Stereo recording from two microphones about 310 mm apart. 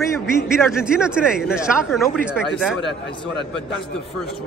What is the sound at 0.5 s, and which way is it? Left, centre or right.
A man's voice, centre.